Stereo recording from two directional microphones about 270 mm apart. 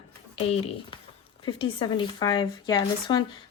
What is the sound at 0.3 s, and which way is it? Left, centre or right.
Speech, left.